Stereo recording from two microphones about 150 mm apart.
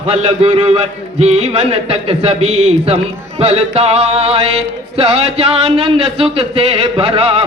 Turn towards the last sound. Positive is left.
turn(degrees=-40)  # may be behind; listen again after turning